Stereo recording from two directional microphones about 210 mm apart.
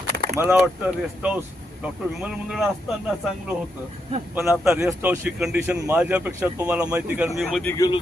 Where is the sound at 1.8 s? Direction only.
5° right (ahead or behind).